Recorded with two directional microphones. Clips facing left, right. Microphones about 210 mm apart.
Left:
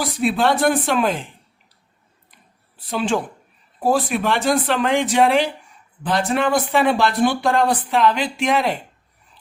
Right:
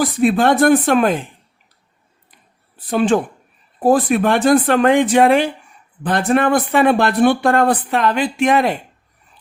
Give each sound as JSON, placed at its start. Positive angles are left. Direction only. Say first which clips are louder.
{"t": 0.0, "sound": "speech", "louder": "right 5 dB", "side_deg": -50}
{"t": 2.7, "sound": "a woman's voice", "louder": "right 6 dB", "side_deg": -55}